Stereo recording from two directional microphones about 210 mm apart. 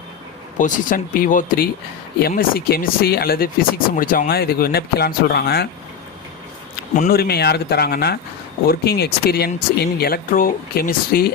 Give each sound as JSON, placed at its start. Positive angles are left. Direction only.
{"t": 0.6, "sound": "speech", "side_deg": 40}
{"t": 6.9, "sound": "speech", "side_deg": 40}